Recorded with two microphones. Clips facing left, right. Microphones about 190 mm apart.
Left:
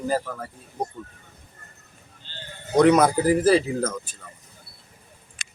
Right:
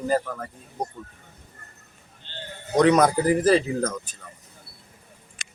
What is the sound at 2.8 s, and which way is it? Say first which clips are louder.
Speech: left 1 dB; 10° left (ahead or behind).